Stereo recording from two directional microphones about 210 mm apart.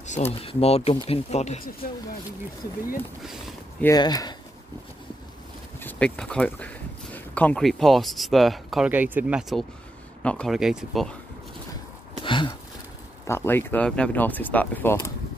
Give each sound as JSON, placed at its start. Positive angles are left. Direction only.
{"t": 0.0, "sound": "speech", "side_deg": 30}
{"t": 3.8, "sound": "speech", "side_deg": 20}
{"t": 5.8, "sound": "speech", "side_deg": 5}
{"t": 12.2, "sound": "a sound", "side_deg": 20}
{"t": 13.3, "sound": "speech", "side_deg": 10}